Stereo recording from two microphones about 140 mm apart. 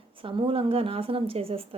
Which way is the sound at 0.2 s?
40° right (ahead or behind).